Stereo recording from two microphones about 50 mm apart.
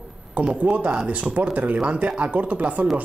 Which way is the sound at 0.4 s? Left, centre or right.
Right.